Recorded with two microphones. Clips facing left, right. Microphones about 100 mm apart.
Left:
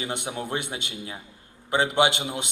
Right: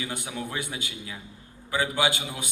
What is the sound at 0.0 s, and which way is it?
A man's voice, 30° left (ahead or behind).